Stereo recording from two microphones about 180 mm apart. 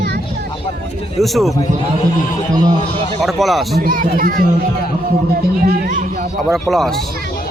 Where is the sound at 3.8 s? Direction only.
50° right (ahead or behind).